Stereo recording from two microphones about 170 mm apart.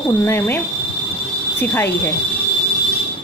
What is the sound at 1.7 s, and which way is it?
Speech, 10° left (ahead or behind).